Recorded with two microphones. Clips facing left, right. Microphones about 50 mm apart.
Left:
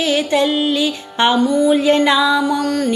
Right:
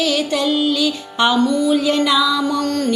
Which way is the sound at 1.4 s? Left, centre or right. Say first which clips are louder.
Left 2 dB; centre.